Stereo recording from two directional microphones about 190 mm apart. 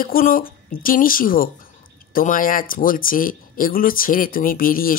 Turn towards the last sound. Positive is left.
turn(degrees=50)  # may be behind; listen again after turning